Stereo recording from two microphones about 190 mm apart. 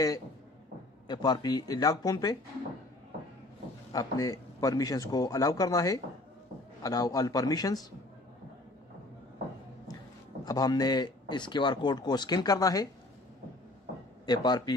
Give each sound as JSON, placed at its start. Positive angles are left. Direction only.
{"t": 1.0, "sound": "speech", "side_deg": 20}
{"t": 3.9, "sound": "a man's voice", "side_deg": 20}
{"t": 10.4, "sound": "speech", "side_deg": 20}
{"t": 14.2, "sound": "speech", "side_deg": 20}